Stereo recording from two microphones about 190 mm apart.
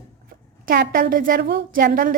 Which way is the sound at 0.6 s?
45° right (ahead or behind).